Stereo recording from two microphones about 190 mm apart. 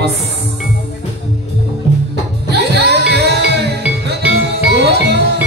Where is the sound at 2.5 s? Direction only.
60° right (ahead or behind).